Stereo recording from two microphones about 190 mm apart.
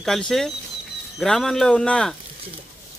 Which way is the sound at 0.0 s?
Centre (ahead or behind).